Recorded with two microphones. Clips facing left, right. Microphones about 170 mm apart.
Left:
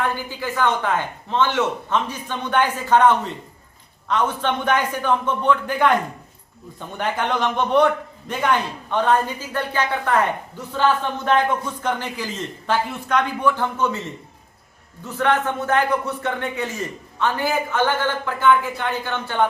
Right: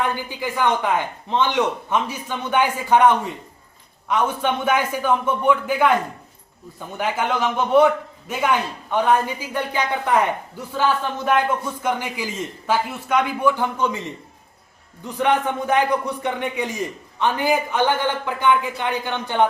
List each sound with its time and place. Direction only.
0.0 s a man's voice: 15° right (ahead or behind)